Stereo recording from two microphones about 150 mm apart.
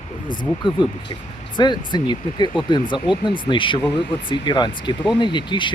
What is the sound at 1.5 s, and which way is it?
Speech, 30° left (ahead or behind).